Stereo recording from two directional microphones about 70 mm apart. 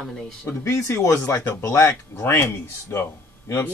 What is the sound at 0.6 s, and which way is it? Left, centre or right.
Speech, left.